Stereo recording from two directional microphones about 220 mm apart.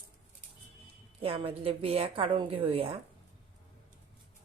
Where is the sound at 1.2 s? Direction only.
25° right (ahead or behind).